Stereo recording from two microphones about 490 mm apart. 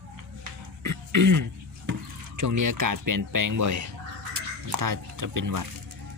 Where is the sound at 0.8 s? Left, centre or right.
Right.